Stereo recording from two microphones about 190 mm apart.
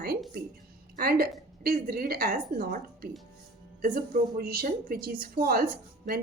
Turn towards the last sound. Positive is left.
turn(degrees=-50)  # may be behind; listen again after turning